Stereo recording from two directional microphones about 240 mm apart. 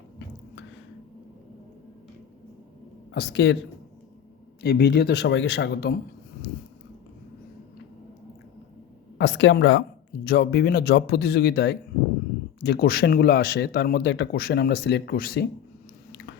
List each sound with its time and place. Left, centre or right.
3.2 s speech: left
4.6 s speech: left
9.1 s speech: left